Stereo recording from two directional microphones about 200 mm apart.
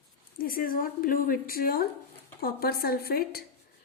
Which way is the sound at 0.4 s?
45° left (ahead or behind).